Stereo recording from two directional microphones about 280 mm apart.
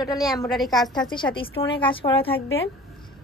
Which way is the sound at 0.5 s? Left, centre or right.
Centre.